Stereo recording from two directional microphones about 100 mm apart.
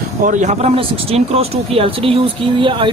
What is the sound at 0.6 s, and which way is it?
Speech, 90° right.